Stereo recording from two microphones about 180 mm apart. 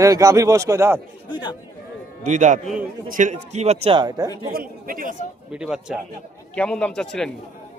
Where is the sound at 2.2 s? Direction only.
45° right (ahead or behind); by 4.3 s 25° right (ahead or behind).